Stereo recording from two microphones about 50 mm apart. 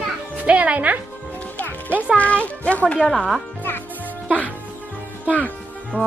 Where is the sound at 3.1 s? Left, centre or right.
Centre.